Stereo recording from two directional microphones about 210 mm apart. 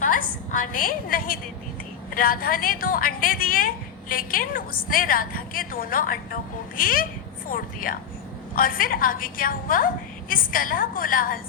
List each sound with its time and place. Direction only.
0.0 s a woman's voice: 40° left (ahead or behind)